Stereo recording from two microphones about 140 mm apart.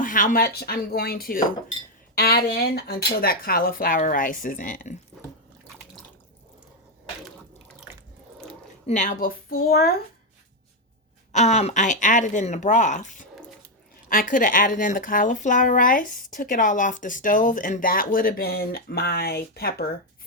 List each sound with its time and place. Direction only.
0.0 s speech: 75° left (ahead or behind)
8.9 s speech: 60° left (ahead or behind); by 9.9 s 90° left
11.3 s speech: 55° left (ahead or behind)
14.1 s speech: 75° left (ahead or behind)